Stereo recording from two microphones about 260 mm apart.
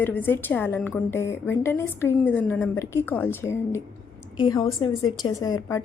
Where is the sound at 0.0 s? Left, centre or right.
Centre.